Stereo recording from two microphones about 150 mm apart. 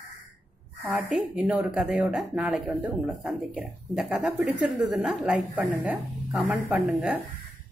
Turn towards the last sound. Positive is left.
turn(degrees=-5)  # may be behind; listen again after turning